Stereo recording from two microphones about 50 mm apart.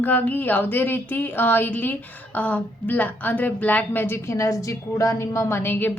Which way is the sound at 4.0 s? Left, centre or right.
Left.